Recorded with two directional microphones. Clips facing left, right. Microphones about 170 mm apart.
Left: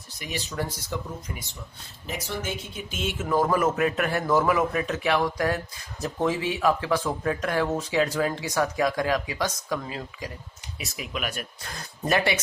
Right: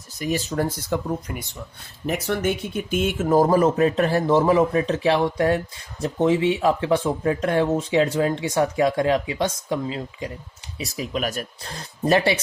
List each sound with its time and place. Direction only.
0.2 s speech: 45° right (ahead or behind); by 10.3 s 25° right (ahead or behind)
10.8 s speech: 35° right (ahead or behind)